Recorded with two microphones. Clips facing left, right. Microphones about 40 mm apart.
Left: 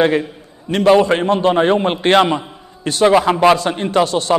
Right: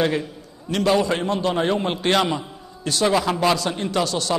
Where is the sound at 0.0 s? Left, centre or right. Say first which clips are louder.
Left 7 dB; left.